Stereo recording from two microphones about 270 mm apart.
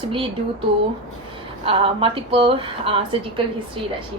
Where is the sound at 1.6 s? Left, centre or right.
Centre.